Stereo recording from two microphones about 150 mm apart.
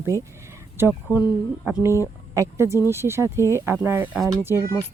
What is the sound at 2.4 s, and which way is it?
Speech, 20° right (ahead or behind).